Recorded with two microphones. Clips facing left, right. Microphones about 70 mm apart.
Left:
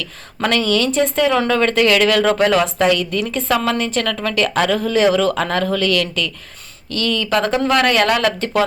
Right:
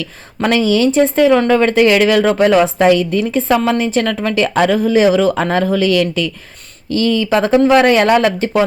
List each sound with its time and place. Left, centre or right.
0.4 s a woman's voice: centre